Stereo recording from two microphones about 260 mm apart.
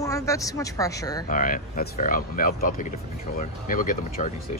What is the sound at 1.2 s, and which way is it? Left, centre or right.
Speech, left.